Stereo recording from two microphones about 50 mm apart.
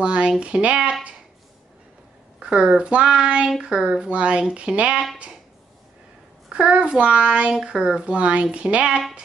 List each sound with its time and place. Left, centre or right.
0.0 s speech: right
2.4 s speech: centre
6.5 s speech: right